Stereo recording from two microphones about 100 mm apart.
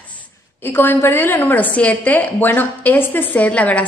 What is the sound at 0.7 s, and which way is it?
A woman's voice, 20° left (ahead or behind).